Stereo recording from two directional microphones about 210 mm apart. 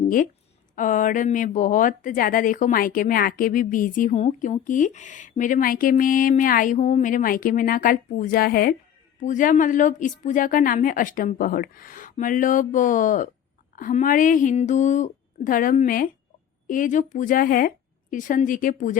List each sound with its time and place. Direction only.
0.8 s speech: 40° left (ahead or behind)